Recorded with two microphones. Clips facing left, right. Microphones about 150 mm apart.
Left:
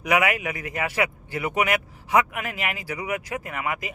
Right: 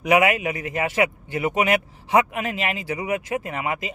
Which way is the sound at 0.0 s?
25° right (ahead or behind).